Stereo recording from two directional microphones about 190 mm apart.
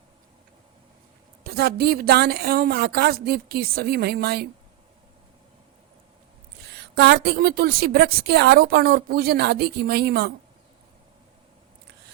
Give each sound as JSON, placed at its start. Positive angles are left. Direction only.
{"t": 1.5, "sound": "a woman's voice", "side_deg": -55}
{"t": 6.7, "sound": "a woman's voice", "side_deg": -60}